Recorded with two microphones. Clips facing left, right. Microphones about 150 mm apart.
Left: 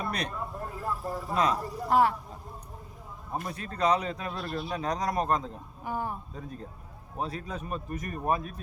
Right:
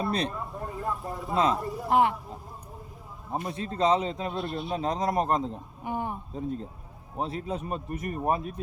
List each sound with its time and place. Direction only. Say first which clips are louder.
0.0 s speech: right 5 dB; 30° right (ahead or behind)
0.8 s vehicle: even; centre (ahead or behind)
1.3 s a man's voice: right 2 dB; 25° right (ahead or behind)
1.5 s speech: right 2 dB; centre (ahead or behind)
1.9 s a man's voice: right 1 dB; 20° right (ahead or behind)
3.4 s a man's voice: right 2 dB; 25° right (ahead or behind)